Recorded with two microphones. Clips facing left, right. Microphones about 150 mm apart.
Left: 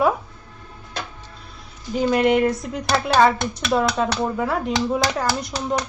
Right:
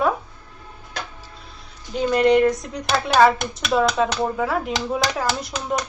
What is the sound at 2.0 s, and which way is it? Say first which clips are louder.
A woman's voice: right 1 dB; 5° left (ahead or behind).